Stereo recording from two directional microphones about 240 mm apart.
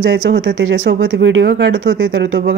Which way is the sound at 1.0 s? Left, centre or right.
Right.